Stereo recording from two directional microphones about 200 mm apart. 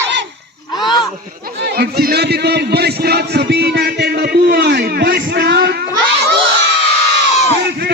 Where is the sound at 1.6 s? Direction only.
55° right (ahead or behind).